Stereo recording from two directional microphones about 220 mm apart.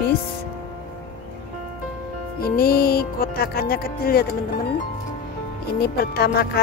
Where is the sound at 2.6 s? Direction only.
45° left (ahead or behind).